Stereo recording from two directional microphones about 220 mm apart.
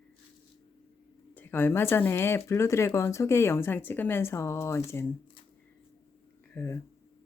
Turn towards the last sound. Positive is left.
turn(degrees=10)  # may be behind; listen again after turning